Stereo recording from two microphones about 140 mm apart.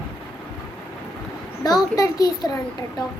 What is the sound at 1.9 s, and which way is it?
Speech, 25° left (ahead or behind).